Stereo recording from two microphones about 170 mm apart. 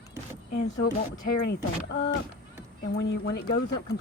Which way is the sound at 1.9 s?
90° left.